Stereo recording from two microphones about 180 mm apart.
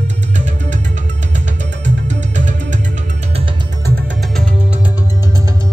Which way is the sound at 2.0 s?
40° right (ahead or behind).